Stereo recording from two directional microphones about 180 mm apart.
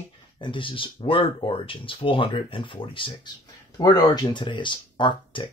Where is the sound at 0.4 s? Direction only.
30° left (ahead or behind).